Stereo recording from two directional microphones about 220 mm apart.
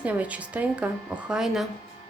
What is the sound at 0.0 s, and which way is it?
Speech, 5° right (ahead or behind).